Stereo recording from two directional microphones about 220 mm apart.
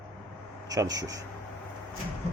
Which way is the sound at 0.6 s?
15° right (ahead or behind).